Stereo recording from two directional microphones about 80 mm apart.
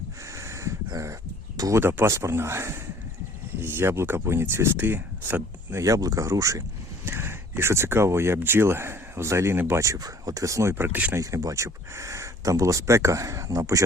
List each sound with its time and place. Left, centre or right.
0.3 s a sound: right
1.7 s speech: right
5.8 s speech: right
7.0 s speech: right
11.2 s speech: right